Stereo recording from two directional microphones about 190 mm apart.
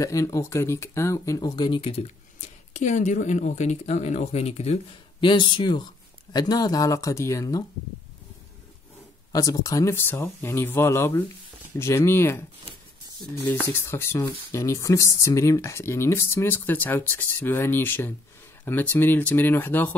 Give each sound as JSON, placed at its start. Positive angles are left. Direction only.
{"t": 0.0, "sound": "speech", "side_deg": 15}
{"t": 9.3, "sound": "speech", "side_deg": 20}
{"t": 13.7, "sound": "speech", "side_deg": 10}